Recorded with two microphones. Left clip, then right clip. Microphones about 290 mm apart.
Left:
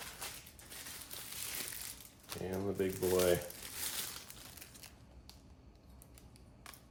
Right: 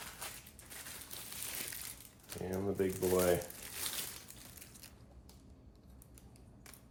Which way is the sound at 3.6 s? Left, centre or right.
Centre.